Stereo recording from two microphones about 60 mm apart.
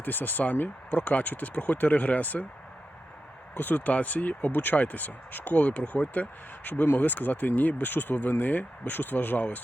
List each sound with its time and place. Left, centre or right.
0.0 s speech: left
3.5 s speech: left